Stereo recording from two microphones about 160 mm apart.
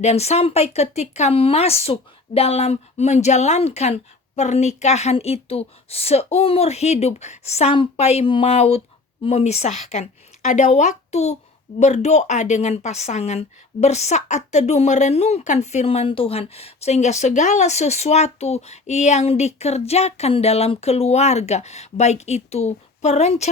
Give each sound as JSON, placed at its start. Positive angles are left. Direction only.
{"t": 0.0, "sound": "a woman's voice", "side_deg": 40}